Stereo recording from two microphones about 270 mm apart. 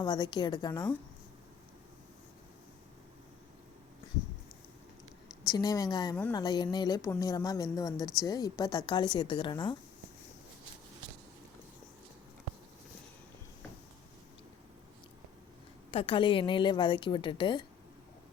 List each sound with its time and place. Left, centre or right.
0.0 s a woman's voice: centre
5.5 s a woman's voice: centre
15.9 s a woman's voice: centre